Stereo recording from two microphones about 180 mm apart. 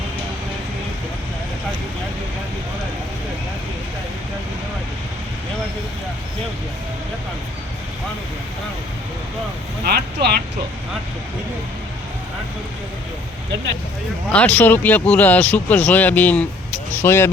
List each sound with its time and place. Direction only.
9.8 s speech: 60° right (ahead or behind)
14.3 s speech: 10° left (ahead or behind)